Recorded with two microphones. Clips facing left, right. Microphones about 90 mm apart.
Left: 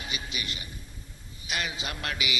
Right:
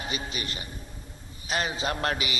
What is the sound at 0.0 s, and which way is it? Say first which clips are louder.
A man's voice: right 3 dB; 35° right (ahead or behind).